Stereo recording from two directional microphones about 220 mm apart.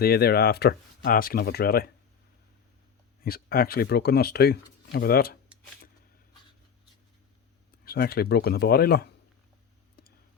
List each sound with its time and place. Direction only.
0.0 s speech: 45° left (ahead or behind)
3.2 s speech: 45° left (ahead or behind)
7.9 s speech: 45° left (ahead or behind)